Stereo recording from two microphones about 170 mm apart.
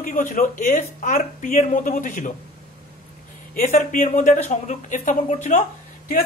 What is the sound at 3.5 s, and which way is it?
Speech, 45° left (ahead or behind).